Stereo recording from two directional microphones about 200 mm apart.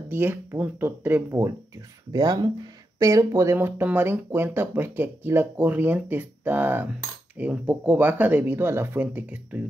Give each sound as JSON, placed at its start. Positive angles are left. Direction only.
{"t": 0.1, "sound": "speech", "side_deg": -10}